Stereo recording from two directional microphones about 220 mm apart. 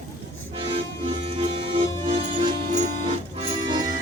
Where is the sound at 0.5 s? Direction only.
25° right (ahead or behind).